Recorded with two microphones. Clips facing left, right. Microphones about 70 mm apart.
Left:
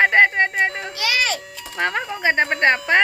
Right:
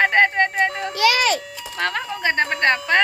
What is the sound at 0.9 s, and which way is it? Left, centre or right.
Speech, right.